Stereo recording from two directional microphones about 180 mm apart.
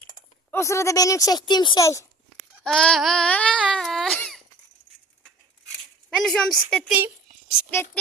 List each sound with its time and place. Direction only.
0.5 s speech: 15° left (ahead or behind)
2.6 s a sound: 5° left (ahead or behind)
6.1 s a woman's voice: centre (ahead or behind)